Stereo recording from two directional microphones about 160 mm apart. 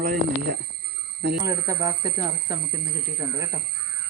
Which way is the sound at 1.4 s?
20° right (ahead or behind).